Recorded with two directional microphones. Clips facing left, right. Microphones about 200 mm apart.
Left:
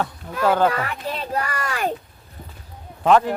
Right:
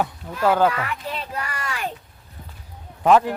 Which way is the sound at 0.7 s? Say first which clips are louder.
Left 2 dB; 40° left (ahead or behind).